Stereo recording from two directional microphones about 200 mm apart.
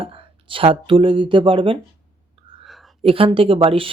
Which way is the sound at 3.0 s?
30° right (ahead or behind).